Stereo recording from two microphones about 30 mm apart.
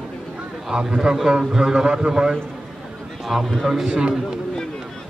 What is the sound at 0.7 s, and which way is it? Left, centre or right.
A man's voice, right.